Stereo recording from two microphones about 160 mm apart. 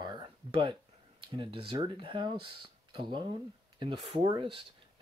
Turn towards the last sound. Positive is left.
turn(degrees=-30)  # may be behind; listen again after turning